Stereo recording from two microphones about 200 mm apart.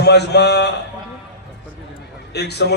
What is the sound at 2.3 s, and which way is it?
Speech, 55° left (ahead or behind).